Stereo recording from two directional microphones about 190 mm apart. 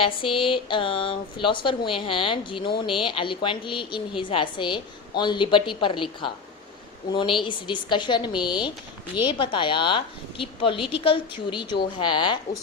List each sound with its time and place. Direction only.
0.0 s a woman's voice: 25° left (ahead or behind)